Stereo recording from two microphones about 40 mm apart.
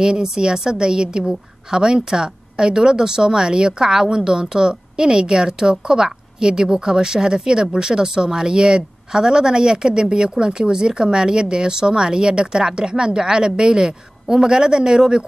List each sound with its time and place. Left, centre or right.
0.0 s a woman's voice: centre